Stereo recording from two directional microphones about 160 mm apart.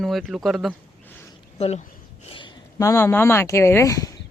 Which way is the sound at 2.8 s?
20° left (ahead or behind).